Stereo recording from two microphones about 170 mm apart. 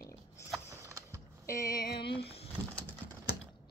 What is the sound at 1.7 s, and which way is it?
Speech, 60° left (ahead or behind).